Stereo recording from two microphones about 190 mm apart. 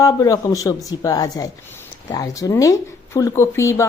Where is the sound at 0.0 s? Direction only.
15° left (ahead or behind).